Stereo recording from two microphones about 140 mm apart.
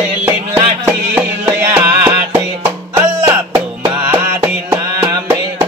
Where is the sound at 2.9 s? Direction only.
20° right (ahead or behind).